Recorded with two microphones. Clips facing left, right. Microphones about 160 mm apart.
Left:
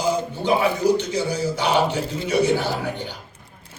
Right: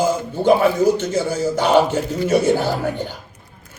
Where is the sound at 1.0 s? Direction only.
45° right (ahead or behind).